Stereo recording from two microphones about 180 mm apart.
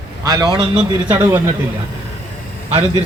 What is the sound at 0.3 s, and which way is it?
Speech, 20° right (ahead or behind).